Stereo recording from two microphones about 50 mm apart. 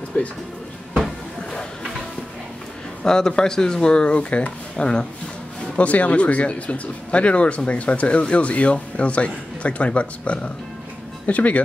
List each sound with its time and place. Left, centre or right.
0.2 s speech: left
3.0 s speech: centre; by 11.6 s left